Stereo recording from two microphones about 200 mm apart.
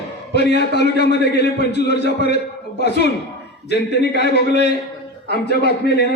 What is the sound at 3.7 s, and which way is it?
A man's voice, 55° left (ahead or behind).